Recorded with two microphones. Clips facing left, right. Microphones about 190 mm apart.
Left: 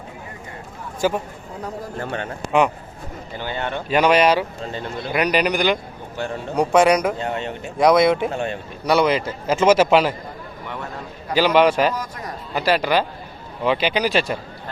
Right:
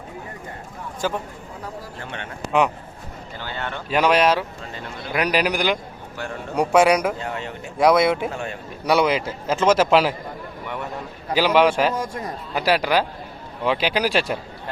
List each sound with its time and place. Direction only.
1.0 s a man's voice: 10° left (ahead or behind)
2.0 s a man's voice: 40° left (ahead or behind)
3.3 s a man's voice: 15° left (ahead or behind)
3.8 s a man's voice: centre (ahead or behind)
7.2 s speech: 25° left (ahead or behind)
7.8 s a man's voice: 5° right (ahead or behind)
8.3 s speech: 25° left (ahead or behind)
8.9 s a man's voice: 5° right (ahead or behind)
11.3 s a man's voice: 5° right (ahead or behind)
11.9 s a man's voice: 25° right (ahead or behind)
12.5 s a man's voice: 5° right (ahead or behind)